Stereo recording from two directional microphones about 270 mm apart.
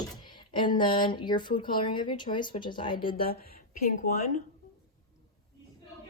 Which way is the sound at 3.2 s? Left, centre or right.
Left.